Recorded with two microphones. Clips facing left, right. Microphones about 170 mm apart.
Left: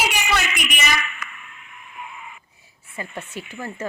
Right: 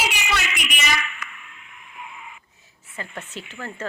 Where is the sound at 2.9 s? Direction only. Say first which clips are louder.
Left 2 dB; 10° left (ahead or behind).